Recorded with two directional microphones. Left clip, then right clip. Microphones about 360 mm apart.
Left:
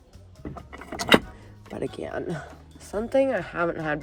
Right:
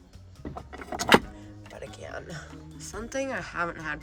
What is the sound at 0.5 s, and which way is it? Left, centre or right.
Vehicle, centre.